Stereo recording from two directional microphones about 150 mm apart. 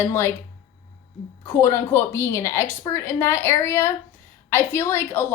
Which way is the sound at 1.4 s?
15° left (ahead or behind).